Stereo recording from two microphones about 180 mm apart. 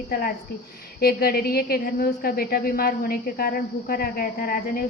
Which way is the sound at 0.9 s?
60° left (ahead or behind).